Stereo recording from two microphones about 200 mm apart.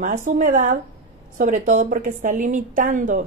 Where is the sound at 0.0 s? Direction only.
40° right (ahead or behind).